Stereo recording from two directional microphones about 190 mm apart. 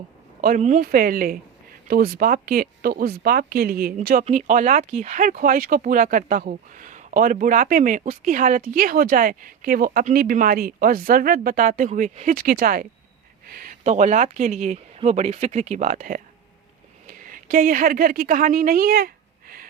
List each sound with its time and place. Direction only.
0.4 s speech: 45° right (ahead or behind)
17.2 s a woman's voice: 45° right (ahead or behind)